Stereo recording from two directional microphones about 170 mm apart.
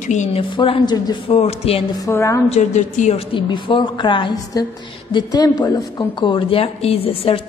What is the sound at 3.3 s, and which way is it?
A woman's voice, 30° left (ahead or behind).